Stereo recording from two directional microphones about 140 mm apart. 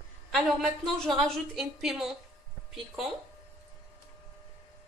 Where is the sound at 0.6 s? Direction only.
5° left (ahead or behind).